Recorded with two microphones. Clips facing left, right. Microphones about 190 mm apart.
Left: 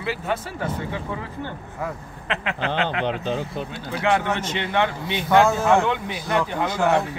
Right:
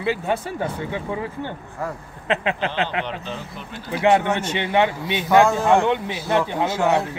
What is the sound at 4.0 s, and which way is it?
A man's voice, 10° right (ahead or behind).